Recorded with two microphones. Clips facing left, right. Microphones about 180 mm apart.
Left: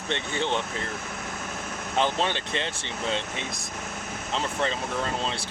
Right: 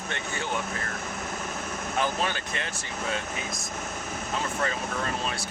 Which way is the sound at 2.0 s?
25° left (ahead or behind).